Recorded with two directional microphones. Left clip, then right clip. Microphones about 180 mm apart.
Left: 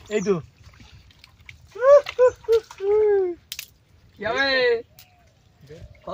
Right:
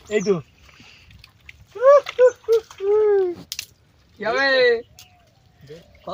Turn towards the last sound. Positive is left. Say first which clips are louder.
# right 3 dB
turn(degrees=25)  # may be behind; listen again after turning